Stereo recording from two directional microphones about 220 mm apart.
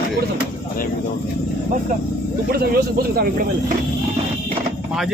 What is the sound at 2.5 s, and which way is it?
Speech, 45° right (ahead or behind).